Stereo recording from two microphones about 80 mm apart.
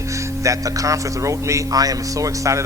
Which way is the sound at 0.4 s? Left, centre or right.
Right.